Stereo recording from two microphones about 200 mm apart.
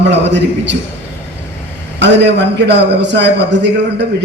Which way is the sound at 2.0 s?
60° right (ahead or behind).